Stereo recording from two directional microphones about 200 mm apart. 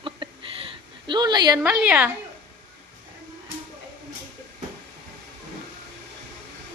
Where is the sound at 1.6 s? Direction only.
5° right (ahead or behind).